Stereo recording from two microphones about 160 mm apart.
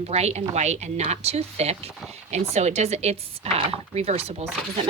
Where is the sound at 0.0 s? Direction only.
40° right (ahead or behind).